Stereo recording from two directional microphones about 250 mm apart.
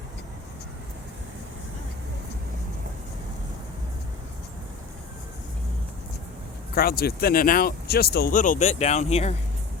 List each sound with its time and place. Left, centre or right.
6.7 s speech: left